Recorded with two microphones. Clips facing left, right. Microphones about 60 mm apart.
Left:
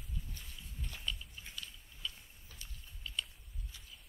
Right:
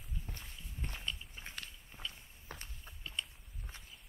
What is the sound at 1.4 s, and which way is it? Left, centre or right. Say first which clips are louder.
Biting: right 1 dB; right.